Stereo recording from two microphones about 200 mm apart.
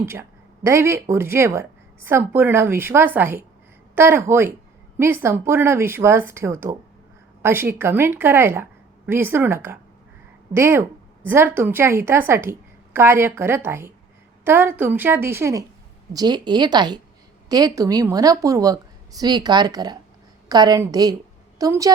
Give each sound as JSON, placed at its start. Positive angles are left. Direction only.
{"t": 0.0, "sound": "a woman's voice", "side_deg": -15}